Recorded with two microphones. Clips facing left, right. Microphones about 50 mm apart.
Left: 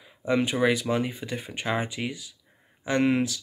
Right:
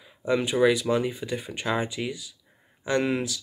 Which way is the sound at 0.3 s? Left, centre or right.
Left.